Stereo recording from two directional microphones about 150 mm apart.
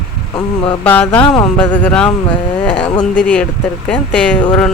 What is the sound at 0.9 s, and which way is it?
Speech, 10° left (ahead or behind).